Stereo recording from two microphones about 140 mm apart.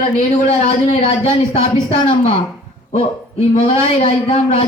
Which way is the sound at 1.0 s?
50° left (ahead or behind).